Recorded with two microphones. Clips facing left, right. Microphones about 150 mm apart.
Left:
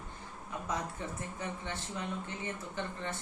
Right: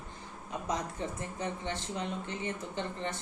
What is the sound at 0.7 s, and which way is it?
Speech, 20° right (ahead or behind).